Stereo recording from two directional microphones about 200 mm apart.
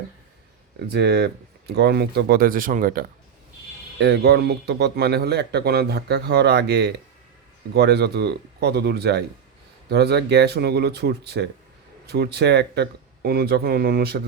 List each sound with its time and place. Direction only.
0.9 s speech: 55° right (ahead or behind)
3.9 s speech: 55° right (ahead or behind)